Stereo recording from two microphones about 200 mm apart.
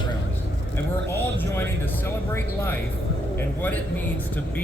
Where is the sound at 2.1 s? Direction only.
10° left (ahead or behind).